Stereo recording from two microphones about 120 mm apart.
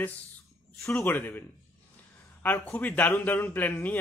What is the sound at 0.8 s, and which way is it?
Speech, 20° left (ahead or behind).